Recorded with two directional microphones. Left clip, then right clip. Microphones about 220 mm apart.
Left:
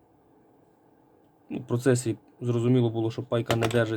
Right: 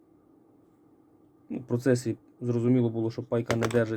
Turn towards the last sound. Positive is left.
turn(degrees=0)  # may be behind; listen again after turning